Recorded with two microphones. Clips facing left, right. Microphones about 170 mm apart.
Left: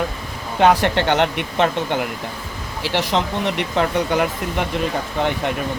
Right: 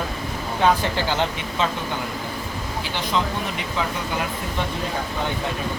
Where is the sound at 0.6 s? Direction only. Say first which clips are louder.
Left 5 dB; 75° left (ahead or behind).